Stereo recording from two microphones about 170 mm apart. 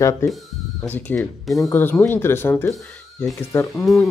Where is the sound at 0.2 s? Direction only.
15° left (ahead or behind).